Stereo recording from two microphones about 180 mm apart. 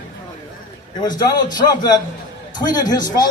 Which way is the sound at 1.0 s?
20° left (ahead or behind).